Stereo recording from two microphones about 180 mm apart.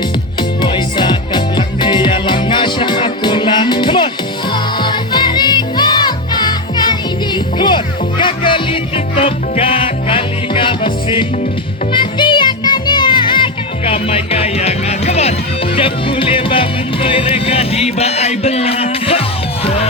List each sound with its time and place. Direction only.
0.6 s music: 25° left (ahead or behind)